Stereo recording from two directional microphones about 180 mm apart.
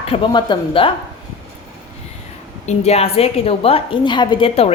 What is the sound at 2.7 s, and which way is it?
A woman's voice, 35° left (ahead or behind).